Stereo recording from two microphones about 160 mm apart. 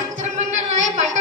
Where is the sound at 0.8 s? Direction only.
50° right (ahead or behind).